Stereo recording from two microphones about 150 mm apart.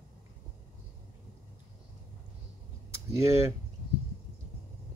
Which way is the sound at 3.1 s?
20° right (ahead or behind).